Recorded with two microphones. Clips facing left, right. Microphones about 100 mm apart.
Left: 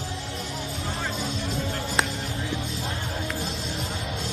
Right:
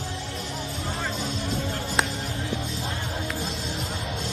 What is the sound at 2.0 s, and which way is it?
Music, 40° right (ahead or behind).